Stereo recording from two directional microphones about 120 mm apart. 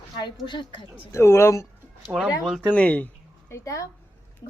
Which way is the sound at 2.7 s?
10° left (ahead or behind).